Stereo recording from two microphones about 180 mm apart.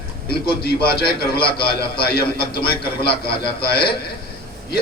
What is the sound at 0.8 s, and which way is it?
A man's voice, 60° left (ahead or behind).